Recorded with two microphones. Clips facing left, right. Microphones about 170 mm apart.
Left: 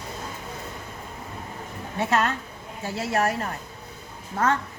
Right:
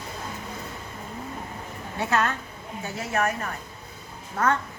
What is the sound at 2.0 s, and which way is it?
A woman's voice, 25° left (ahead or behind).